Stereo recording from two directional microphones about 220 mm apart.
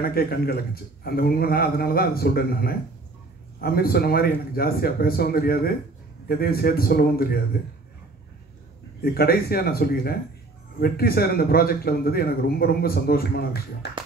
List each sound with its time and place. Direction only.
0.0 s a man's voice: 45° left (ahead or behind)
9.0 s a man's voice: 45° left (ahead or behind)